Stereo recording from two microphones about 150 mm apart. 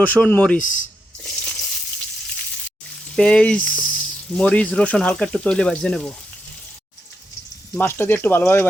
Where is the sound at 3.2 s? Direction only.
5° left (ahead or behind).